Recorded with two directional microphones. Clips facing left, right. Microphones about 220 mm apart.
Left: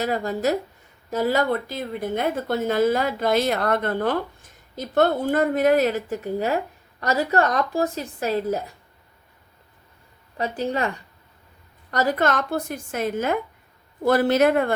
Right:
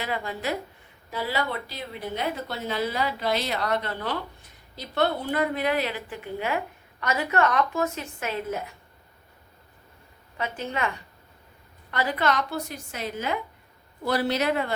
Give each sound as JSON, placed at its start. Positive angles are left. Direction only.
{"t": 0.0, "sound": "a woman's voice", "side_deg": 40}
{"t": 10.3, "sound": "a woman's voice", "side_deg": 35}